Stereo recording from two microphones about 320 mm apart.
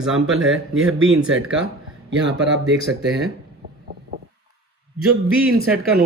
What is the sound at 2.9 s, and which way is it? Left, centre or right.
Speech, centre.